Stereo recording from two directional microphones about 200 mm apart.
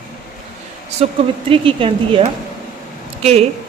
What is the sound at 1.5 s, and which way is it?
Speech, 25° right (ahead or behind).